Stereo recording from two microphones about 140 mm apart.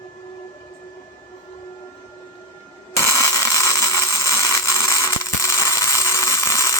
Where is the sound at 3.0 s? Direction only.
20° left (ahead or behind).